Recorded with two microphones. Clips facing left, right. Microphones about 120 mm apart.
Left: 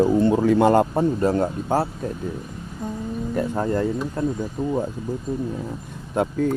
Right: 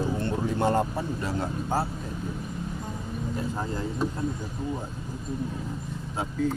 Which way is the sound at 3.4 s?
60° left (ahead or behind).